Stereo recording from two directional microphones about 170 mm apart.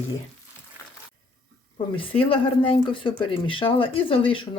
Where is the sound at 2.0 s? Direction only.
30° left (ahead or behind).